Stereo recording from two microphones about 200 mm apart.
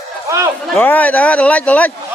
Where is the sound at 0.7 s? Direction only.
10° left (ahead or behind).